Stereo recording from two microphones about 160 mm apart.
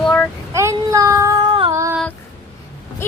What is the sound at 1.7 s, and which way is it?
Female singing, 20° right (ahead or behind).